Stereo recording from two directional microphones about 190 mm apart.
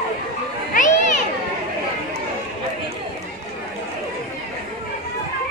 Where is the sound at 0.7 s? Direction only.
40° left (ahead or behind).